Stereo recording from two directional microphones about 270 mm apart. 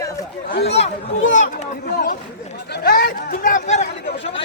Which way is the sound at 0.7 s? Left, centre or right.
Left.